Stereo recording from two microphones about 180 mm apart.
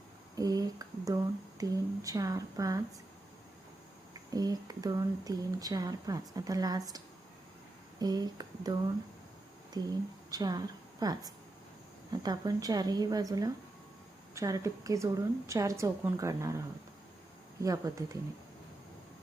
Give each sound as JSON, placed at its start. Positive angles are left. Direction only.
{"t": 0.3, "sound": "speech", "side_deg": -20}
{"t": 4.1, "sound": "speech", "side_deg": -20}
{"t": 9.7, "sound": "a woman's voice", "side_deg": -20}